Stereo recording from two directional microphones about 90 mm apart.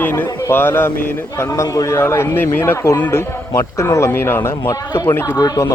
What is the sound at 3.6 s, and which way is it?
Speech, 35° left (ahead or behind).